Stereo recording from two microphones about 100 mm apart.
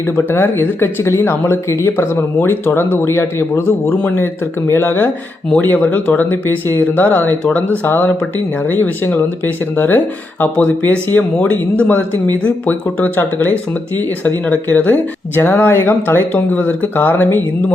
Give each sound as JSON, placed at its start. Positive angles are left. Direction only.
{"t": 0.2, "sound": "speech", "side_deg": 20}